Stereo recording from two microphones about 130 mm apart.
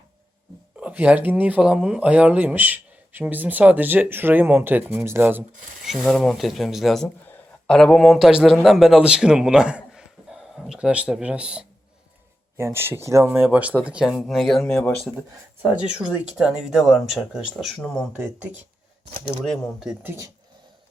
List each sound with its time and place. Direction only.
0.8 s speech: 10° right (ahead or behind)
5.8 s a man's voice: centre (ahead or behind)
12.5 s speech: 20° right (ahead or behind); by 15.1 s 5° left (ahead or behind)
15.6 s speech: 5° right (ahead or behind)
19.5 s speech: 5° right (ahead or behind)
20.0 s speech: 20° right (ahead or behind)